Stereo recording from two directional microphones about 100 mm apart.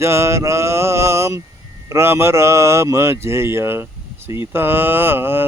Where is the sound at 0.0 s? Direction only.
30° right (ahead or behind).